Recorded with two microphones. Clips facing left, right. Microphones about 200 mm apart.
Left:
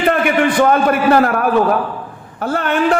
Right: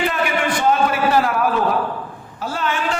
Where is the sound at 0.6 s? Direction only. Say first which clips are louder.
Left 3 dB; 55° left (ahead or behind).